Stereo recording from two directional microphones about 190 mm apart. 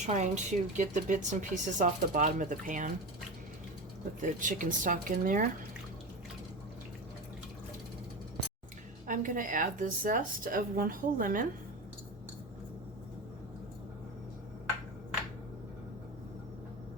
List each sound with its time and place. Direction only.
0.0 s speech: 40° right (ahead or behind)
4.2 s a woman's voice: 45° right (ahead or behind)
9.0 s a woman's voice: 45° right (ahead or behind)